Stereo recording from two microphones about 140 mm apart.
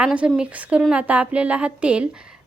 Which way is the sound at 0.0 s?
10° right (ahead or behind).